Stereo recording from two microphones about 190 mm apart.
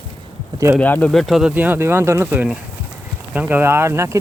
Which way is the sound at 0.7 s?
10° left (ahead or behind).